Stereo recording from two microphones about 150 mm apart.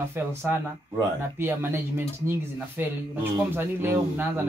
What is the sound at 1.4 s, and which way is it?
Speech, 15° right (ahead or behind).